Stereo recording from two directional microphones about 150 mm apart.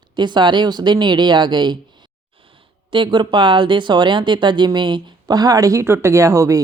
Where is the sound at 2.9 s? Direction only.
30° right (ahead or behind).